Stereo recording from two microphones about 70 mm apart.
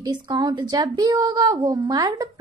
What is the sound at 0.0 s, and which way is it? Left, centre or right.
Speech, right.